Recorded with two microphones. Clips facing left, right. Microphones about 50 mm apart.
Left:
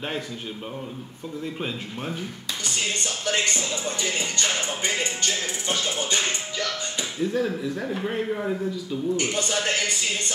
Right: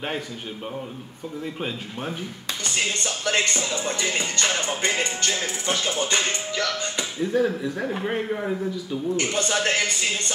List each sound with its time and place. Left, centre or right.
2.6 s speech: right
7.2 s speech: centre
9.1 s speech: right